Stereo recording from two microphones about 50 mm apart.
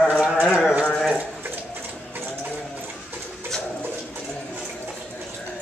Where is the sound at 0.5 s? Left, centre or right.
Centre.